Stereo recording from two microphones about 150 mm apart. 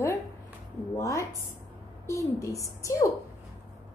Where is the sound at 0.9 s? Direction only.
20° left (ahead or behind).